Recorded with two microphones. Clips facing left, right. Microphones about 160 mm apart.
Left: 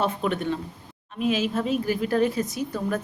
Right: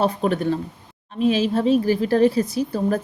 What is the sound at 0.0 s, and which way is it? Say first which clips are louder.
A woman's voice: right 5 dB; 35° right (ahead or behind).